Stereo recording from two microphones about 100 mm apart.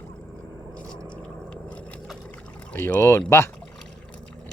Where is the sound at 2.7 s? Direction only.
20° left (ahead or behind).